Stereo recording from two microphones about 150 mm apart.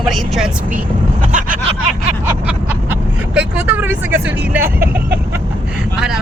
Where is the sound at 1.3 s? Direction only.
60° right (ahead or behind).